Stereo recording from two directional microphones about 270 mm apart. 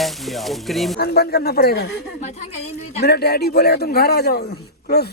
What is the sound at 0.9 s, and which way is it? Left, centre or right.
A man's voice, left.